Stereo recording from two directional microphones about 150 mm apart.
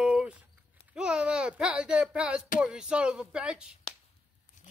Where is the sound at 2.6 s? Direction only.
5° right (ahead or behind).